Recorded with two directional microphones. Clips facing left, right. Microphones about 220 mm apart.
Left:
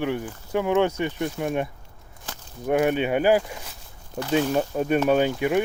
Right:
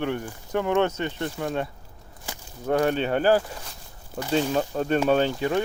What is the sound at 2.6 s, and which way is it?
Speech, 15° left (ahead or behind).